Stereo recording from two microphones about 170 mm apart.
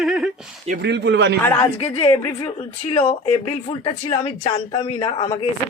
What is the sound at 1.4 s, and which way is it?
Speech, 15° left (ahead or behind).